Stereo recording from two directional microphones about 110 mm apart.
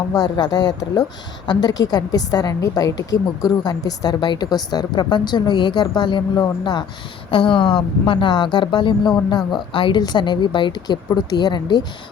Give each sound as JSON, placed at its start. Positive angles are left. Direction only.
{"t": 0.1, "sound": "a woman's voice", "side_deg": 35}